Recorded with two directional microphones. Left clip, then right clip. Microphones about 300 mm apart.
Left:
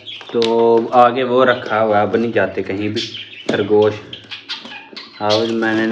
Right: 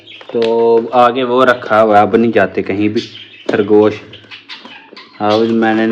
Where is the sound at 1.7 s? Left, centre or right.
Centre.